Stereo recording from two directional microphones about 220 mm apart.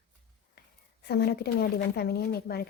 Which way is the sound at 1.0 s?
45° left (ahead or behind).